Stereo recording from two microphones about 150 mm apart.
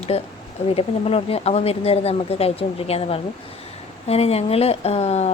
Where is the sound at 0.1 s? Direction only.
40° left (ahead or behind).